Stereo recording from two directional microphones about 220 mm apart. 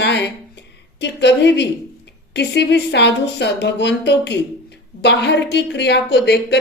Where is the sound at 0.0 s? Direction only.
50° left (ahead or behind).